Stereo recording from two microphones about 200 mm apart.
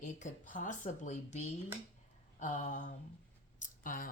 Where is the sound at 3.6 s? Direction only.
45° left (ahead or behind).